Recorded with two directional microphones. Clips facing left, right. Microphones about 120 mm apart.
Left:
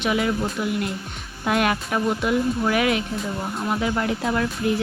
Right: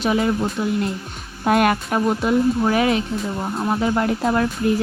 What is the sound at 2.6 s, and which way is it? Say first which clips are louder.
Speech: right 3 dB; 30° right (ahead or behind).